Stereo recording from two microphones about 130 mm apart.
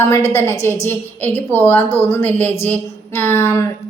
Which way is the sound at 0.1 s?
20° left (ahead or behind).